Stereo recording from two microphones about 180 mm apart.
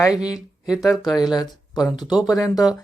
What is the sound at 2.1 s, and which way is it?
Speech, 5° right (ahead or behind).